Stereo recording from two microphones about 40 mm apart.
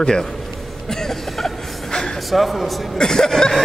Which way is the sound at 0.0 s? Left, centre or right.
Centre.